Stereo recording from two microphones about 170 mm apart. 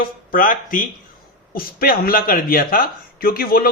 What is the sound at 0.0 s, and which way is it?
Speech, 55° left (ahead or behind).